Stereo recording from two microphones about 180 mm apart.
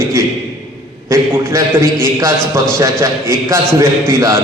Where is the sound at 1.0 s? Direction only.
15° right (ahead or behind).